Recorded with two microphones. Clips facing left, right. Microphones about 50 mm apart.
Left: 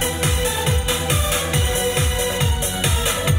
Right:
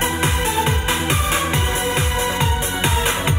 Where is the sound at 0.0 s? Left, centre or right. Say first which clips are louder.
Right 2 dB; right.